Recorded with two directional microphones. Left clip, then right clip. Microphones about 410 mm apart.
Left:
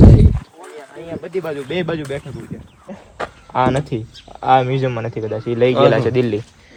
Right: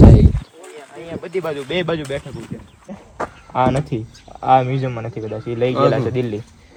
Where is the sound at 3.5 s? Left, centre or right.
Left.